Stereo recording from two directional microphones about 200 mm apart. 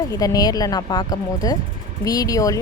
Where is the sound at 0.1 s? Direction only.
20° left (ahead or behind).